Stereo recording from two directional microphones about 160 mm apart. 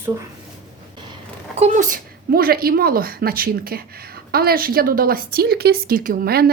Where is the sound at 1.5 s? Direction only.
45° right (ahead or behind).